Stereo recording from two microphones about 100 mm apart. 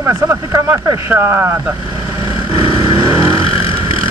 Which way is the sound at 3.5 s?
70° left (ahead or behind).